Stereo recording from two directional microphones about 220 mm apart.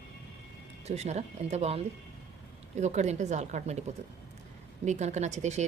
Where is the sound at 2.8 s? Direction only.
30° right (ahead or behind).